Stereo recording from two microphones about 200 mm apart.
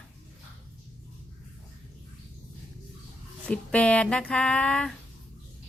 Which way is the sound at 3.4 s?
5° left (ahead or behind).